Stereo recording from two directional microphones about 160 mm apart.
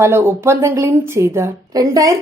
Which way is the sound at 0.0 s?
15° right (ahead or behind).